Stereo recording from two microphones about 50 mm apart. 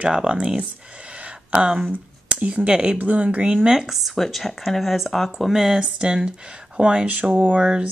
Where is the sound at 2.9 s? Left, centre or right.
Right.